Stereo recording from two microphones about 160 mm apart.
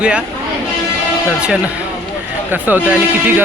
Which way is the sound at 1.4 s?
5° right (ahead or behind).